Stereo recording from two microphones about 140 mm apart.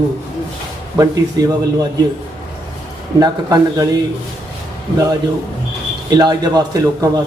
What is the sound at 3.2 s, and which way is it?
Speech, 30° right (ahead or behind).